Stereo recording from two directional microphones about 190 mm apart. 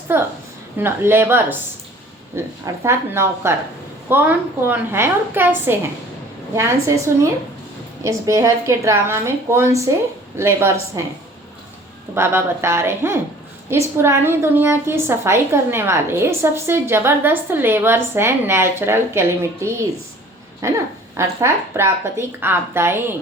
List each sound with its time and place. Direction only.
0.1 s a woman's voice: 10° right (ahead or behind)
12.1 s a woman's voice: 15° right (ahead or behind)